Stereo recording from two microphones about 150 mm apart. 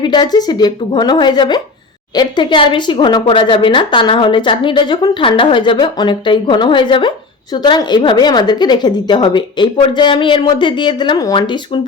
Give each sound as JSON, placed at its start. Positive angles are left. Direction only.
{"t": 0.0, "sound": "a woman's voice", "side_deg": 30}